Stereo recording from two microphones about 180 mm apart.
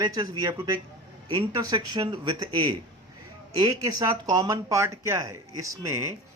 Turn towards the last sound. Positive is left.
turn(degrees=-15)  # may be behind; listen again after turning